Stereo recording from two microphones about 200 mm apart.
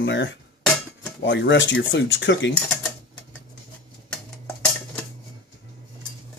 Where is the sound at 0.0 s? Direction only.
60° left (ahead or behind).